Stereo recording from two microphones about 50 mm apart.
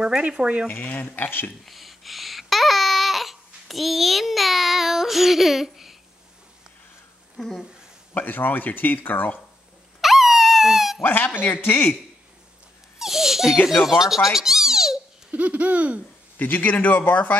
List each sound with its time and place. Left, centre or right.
0.0 s a sound: centre
1.1 s speech: left
1.7 s babbling: centre
7.3 s speech: centre
8.1 s speech: left
10.0 s dog: centre
11.0 s speech: left
13.0 s speech: centre
15.3 s a sound: right
16.3 s speech: left